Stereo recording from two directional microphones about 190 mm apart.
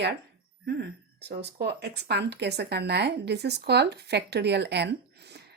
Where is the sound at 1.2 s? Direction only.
60° right (ahead or behind).